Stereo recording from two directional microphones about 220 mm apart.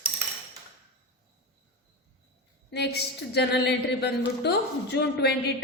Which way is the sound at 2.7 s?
50° left (ahead or behind).